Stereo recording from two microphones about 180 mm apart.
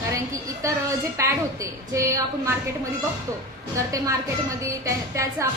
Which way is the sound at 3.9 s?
15° right (ahead or behind).